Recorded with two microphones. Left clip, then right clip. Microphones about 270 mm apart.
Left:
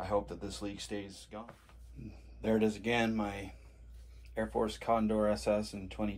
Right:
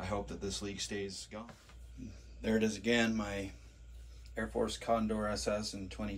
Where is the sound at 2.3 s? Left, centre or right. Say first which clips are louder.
Left 2 dB; left.